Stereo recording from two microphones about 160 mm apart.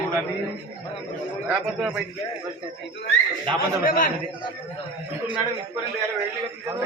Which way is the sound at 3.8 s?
60° left (ahead or behind).